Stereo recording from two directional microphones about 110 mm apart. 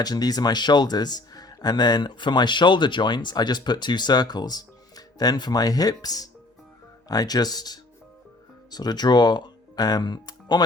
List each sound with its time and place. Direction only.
0.0 s speech: 35° left (ahead or behind)